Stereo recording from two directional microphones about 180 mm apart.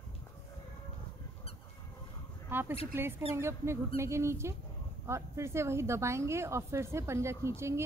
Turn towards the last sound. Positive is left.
turn(degrees=-15)  # may be behind; listen again after turning